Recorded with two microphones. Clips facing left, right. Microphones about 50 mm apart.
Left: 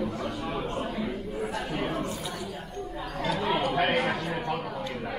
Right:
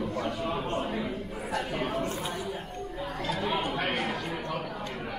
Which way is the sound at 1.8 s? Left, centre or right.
Left.